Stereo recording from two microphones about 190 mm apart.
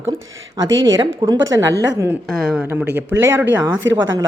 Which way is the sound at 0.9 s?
20° right (ahead or behind).